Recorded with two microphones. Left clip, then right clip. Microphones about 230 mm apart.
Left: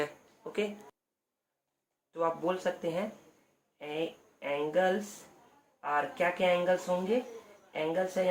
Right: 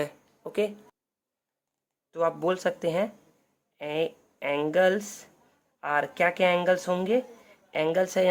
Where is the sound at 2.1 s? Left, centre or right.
Right.